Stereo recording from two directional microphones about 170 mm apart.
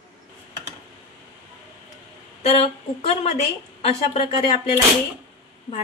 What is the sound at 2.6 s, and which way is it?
Speech, 40° left (ahead or behind).